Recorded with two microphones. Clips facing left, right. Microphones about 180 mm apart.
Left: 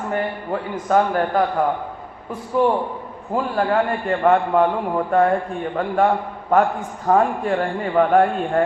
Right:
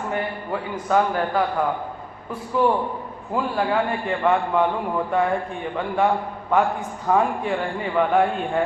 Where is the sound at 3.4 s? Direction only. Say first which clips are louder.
Left 3 dB; 45° left (ahead or behind).